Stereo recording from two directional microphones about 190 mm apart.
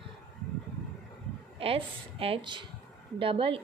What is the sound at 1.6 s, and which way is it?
A woman's voice, 30° right (ahead or behind).